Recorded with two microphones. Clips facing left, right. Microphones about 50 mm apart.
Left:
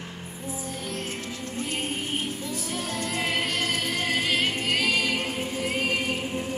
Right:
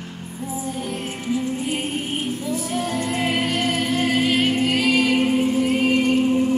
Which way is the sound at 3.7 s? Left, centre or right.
Right.